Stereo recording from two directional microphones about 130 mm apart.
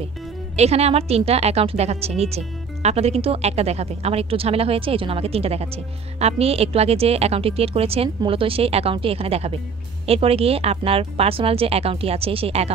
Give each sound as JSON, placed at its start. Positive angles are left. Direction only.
{"t": 0.6, "sound": "a woman's voice", "side_deg": -55}